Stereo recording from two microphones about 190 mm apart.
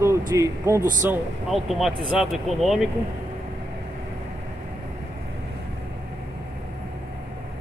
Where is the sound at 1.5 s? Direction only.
Centre (ahead or behind).